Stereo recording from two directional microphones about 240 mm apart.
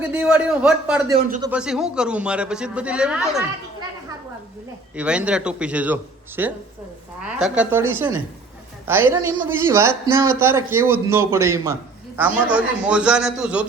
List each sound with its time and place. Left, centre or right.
0.0 s a man's voice: centre
4.9 s a man's voice: centre